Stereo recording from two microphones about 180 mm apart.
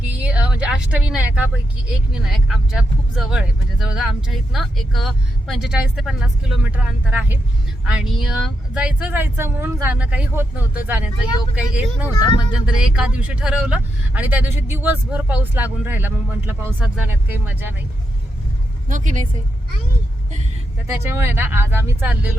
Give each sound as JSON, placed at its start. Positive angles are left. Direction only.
{"t": 0.1, "sound": "vehicle", "side_deg": -5}
{"t": 3.2, "sound": "speech", "side_deg": -5}
{"t": 12.0, "sound": "speech", "side_deg": 25}
{"t": 12.6, "sound": "speech", "side_deg": -5}
{"t": 18.9, "sound": "a woman's voice", "side_deg": -45}
{"t": 20.8, "sound": "speech", "side_deg": -15}